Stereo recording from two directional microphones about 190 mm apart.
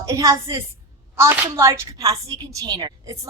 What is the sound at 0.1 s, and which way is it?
A woman's voice, 15° right (ahead or behind).